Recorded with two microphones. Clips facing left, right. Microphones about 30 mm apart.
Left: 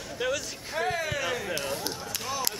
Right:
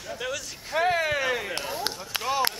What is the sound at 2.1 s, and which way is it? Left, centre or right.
Run, right.